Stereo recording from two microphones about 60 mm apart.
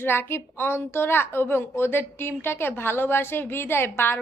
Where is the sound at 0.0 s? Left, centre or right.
Left.